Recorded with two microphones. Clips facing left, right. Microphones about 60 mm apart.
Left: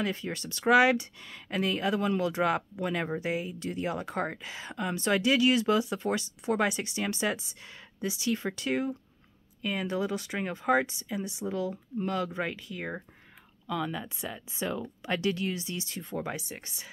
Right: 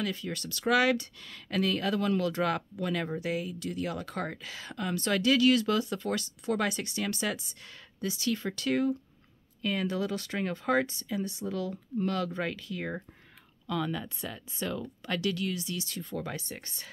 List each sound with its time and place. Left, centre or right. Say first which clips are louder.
0.0 s speech: left 2 dB; left